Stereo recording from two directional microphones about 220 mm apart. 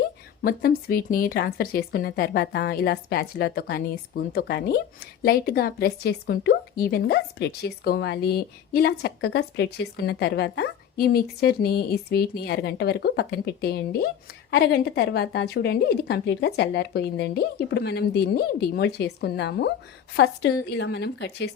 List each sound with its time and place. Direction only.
0.4 s speech: 45° left (ahead or behind)